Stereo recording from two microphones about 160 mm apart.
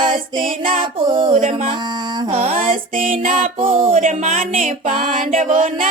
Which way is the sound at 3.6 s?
35° right (ahead or behind).